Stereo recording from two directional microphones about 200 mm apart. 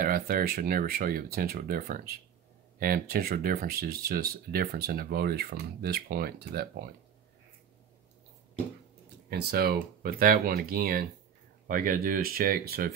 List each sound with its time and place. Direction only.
0.0 s speech: 45° right (ahead or behind)
9.3 s speech: 55° right (ahead or behind)